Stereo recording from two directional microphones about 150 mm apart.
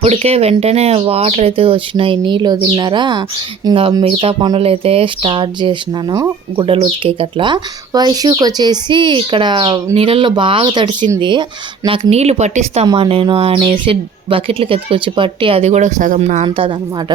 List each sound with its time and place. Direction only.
0.0 s speech: 45° right (ahead or behind)
12.1 s speech: 45° right (ahead or behind)